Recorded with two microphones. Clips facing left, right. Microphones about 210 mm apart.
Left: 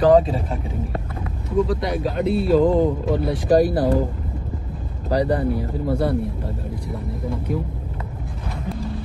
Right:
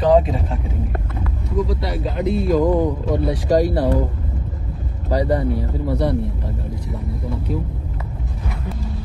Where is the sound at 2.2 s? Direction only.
30° left (ahead or behind).